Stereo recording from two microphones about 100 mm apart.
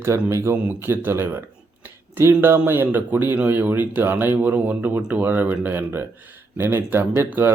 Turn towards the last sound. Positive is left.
turn(degrees=-20)  # may be behind; listen again after turning